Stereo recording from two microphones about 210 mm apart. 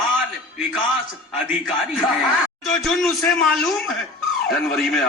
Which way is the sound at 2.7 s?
Centre (ahead or behind).